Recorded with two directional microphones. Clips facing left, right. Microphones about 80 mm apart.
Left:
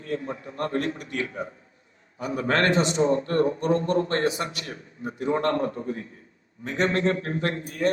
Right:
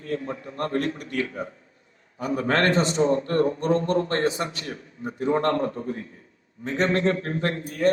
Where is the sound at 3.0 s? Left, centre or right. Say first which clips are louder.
Right 1 dB; centre.